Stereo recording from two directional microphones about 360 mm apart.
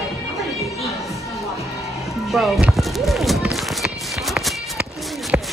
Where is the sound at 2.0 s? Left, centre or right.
Centre.